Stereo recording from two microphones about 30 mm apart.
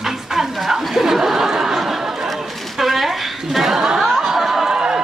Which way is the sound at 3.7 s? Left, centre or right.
Centre.